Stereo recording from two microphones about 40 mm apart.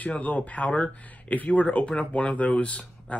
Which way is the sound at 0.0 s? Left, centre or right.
Left.